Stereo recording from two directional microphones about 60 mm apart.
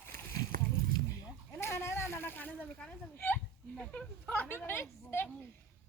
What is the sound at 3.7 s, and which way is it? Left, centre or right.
A woman's voice, centre.